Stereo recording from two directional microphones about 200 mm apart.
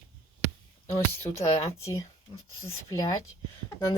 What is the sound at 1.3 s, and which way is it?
Speech, 20° left (ahead or behind).